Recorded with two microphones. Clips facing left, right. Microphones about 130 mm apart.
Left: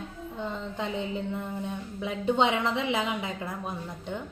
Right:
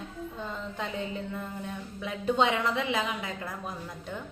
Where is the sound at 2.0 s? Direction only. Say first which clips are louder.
Left 1 dB; 20° left (ahead or behind).